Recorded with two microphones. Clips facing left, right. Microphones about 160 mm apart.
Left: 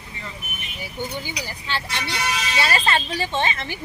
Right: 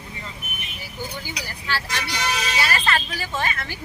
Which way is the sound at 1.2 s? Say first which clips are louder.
Left 1 dB; 15° left (ahead or behind).